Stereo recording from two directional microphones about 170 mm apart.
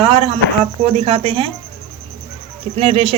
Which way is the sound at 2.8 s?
35° right (ahead or behind).